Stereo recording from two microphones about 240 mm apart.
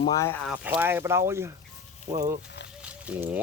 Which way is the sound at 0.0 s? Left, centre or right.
Centre.